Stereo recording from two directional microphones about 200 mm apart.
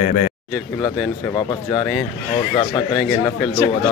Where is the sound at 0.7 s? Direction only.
20° left (ahead or behind).